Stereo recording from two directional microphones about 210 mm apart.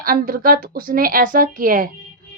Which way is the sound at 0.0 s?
40° right (ahead or behind).